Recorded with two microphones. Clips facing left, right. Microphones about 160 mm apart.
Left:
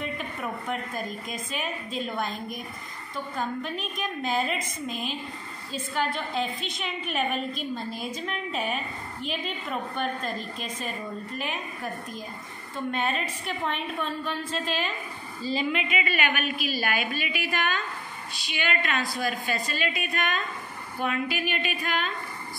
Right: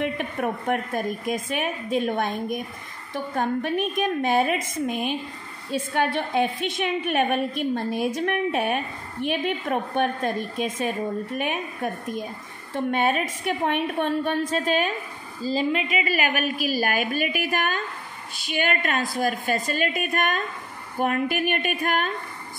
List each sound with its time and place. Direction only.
0.0 s a woman's voice: 65° right (ahead or behind)
11.3 s a woman's voice: 60° right (ahead or behind)
12.9 s a woman's voice: 60° right (ahead or behind)
15.4 s a woman's voice: 35° right (ahead or behind)